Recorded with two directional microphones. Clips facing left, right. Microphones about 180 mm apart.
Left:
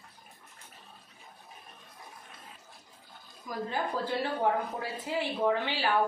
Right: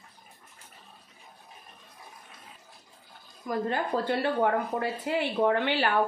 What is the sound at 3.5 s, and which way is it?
Speech, 65° right (ahead or behind).